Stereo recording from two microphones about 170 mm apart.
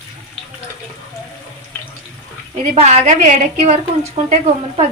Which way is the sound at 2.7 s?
40° right (ahead or behind).